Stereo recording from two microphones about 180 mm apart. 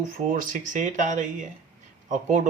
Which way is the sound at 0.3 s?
50° right (ahead or behind).